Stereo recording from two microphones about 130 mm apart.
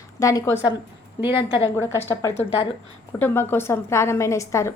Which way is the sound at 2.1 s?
20° left (ahead or behind).